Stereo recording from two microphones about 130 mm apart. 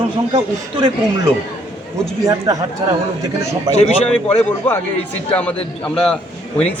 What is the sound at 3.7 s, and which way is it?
Speech, 30° right (ahead or behind).